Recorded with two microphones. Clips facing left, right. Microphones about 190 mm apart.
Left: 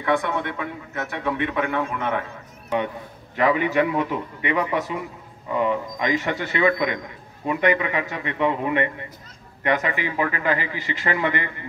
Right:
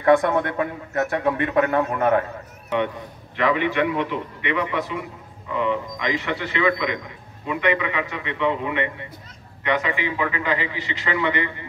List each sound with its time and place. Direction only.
0.0 s a man's voice: 45° right (ahead or behind)
3.3 s a man's voice: 40° left (ahead or behind)